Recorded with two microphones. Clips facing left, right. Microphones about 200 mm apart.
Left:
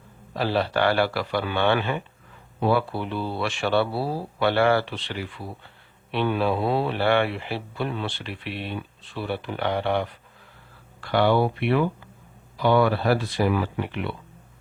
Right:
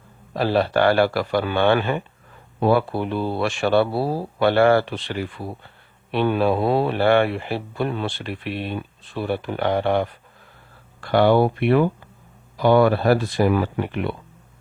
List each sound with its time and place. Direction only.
0.3 s speech: 45° right (ahead or behind)